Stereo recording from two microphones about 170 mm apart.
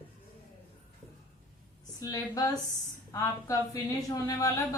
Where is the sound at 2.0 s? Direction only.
20° left (ahead or behind).